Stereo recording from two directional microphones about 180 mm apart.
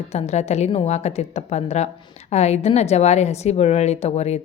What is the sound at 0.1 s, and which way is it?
A woman's voice, 35° left (ahead or behind).